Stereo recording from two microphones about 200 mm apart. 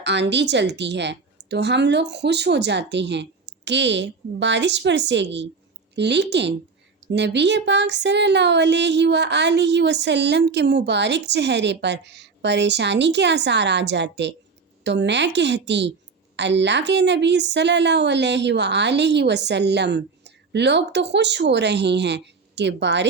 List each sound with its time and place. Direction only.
0.0 s speech: 60° right (ahead or behind)